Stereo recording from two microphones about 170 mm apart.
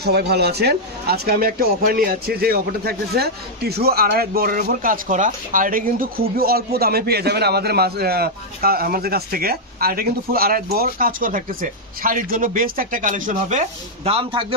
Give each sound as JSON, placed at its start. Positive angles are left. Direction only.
{"t": 0.0, "sound": "speech", "side_deg": -70}